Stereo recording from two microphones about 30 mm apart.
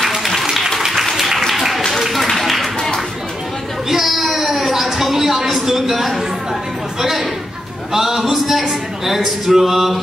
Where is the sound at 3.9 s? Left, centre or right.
Centre.